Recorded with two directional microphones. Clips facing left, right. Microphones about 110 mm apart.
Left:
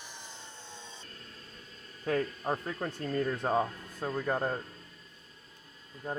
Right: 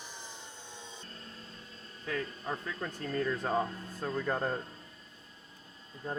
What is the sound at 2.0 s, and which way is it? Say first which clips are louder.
Speech: left 6 dB; 35° left (ahead or behind).